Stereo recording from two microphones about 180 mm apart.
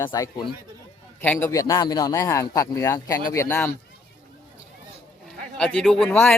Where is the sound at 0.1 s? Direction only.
25° left (ahead or behind).